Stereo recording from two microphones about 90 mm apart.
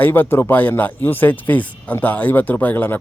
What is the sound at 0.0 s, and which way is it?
A man's voice, 25° left (ahead or behind).